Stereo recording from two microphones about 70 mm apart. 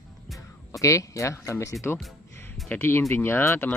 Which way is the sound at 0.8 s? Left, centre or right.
Left.